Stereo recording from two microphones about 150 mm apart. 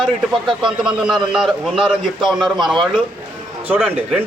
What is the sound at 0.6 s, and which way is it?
A man's voice, 5° right (ahead or behind).